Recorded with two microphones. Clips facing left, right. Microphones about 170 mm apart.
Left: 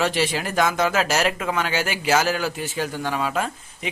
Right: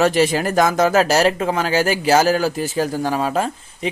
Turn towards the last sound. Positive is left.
turn(degrees=-35)  # may be behind; listen again after turning